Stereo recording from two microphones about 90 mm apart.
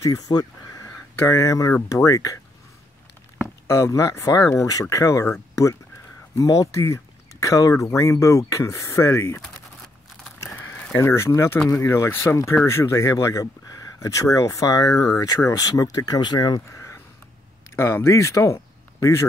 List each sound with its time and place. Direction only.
0.0 s speech: 45° left (ahead or behind)
0.8 s speech: 35° left (ahead or behind)
3.6 s speech: 35° left (ahead or behind)
10.8 s speech: 25° left (ahead or behind); by 16.6 s 50° left (ahead or behind)
16.7 s a sound: 30° left (ahead or behind)
17.7 s speech: 30° left (ahead or behind)